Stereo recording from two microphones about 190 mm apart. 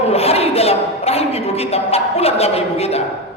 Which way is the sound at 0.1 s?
30° left (ahead or behind).